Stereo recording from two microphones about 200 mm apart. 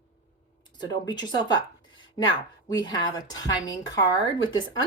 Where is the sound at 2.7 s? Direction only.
20° left (ahead or behind).